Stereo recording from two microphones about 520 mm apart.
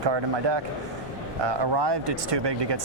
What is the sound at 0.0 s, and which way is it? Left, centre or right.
A man's voice, right.